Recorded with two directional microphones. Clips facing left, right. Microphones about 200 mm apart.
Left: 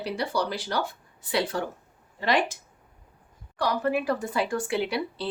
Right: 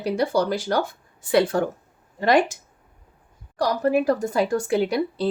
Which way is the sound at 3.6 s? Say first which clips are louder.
Right 5 dB; 40° right (ahead or behind).